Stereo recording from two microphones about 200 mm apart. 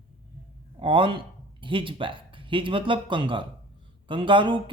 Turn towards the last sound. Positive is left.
turn(degrees=-25)  # may be behind; listen again after turning